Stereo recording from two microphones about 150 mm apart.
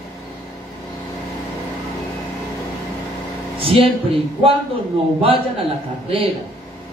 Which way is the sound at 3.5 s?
35° right (ahead or behind).